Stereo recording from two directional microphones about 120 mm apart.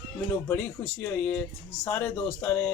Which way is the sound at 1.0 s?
10° left (ahead or behind).